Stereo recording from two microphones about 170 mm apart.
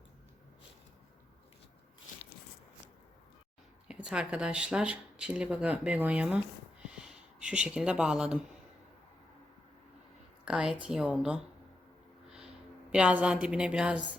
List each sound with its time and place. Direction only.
3.8 s speech: 5° right (ahead or behind)
6.8 s a sound: 5° right (ahead or behind)
10.4 s speech: 5° right (ahead or behind)
12.9 s speech: 5° right (ahead or behind)